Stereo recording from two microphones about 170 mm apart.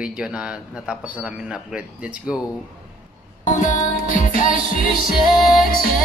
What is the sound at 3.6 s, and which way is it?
Music, 55° left (ahead or behind).